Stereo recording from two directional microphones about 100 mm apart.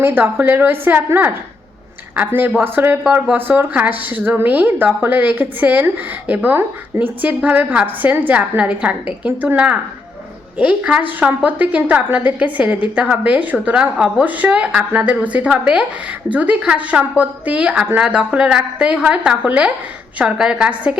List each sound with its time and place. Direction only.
0.0 s a woman's voice: 20° right (ahead or behind)
3.0 s speech: 10° right (ahead or behind)
3.3 s speech: 20° right (ahead or behind)